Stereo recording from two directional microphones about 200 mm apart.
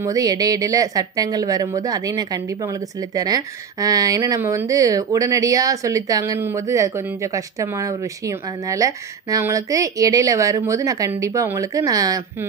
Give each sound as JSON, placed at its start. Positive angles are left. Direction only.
{"t": 0.0, "sound": "speech", "side_deg": -15}